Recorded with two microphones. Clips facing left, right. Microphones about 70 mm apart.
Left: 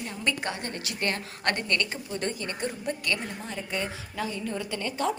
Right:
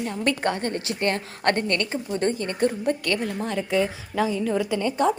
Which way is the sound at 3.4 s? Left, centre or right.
Right.